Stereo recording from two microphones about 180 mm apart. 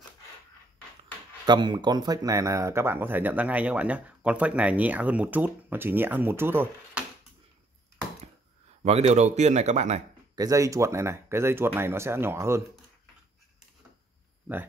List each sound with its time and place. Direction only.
1.4 s speech: 25° right (ahead or behind); by 7.1 s 10° right (ahead or behind)
8.8 s speech: 35° right (ahead or behind)
10.3 s speech: 20° right (ahead or behind)